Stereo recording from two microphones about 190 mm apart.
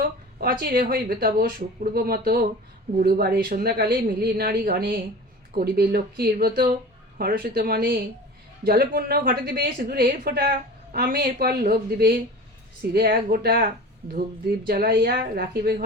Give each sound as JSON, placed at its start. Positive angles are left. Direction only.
{"t": 0.6, "sound": "speech", "side_deg": -50}
{"t": 14.7, "sound": "speech", "side_deg": -50}